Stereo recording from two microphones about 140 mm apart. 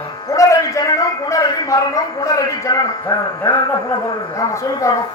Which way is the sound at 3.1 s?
30° left (ahead or behind).